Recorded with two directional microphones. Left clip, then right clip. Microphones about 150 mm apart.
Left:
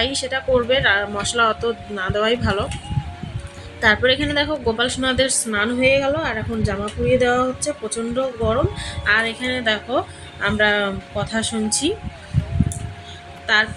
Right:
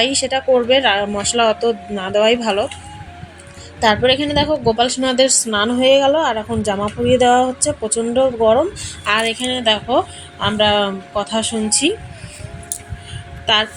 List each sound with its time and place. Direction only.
0.0 s a woman's voice: 20° right (ahead or behind)
3.8 s a woman's voice: 15° right (ahead or behind)
9.0 s speech: 25° right (ahead or behind)